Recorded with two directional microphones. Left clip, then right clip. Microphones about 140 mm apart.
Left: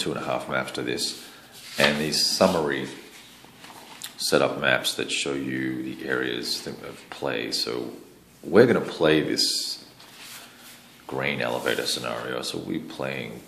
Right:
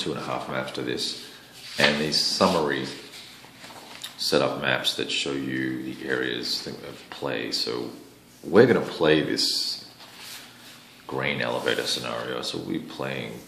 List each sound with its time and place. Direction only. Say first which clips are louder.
0.0 s speech: left 2 dB; 30° left (ahead or behind)
4.0 s speech: left 1 dB; 25° left (ahead or behind)
11.1 s speech: even; 20° left (ahead or behind)